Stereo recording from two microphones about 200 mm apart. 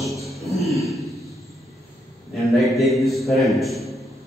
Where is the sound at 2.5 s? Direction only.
Centre (ahead or behind).